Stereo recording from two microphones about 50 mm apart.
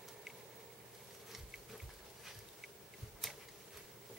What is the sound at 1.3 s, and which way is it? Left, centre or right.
Bee, centre.